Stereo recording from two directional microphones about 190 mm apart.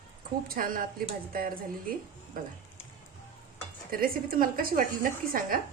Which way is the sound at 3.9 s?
50° right (ahead or behind).